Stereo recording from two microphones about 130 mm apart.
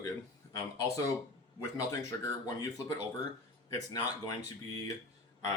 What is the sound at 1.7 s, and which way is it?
Speech, 25° left (ahead or behind).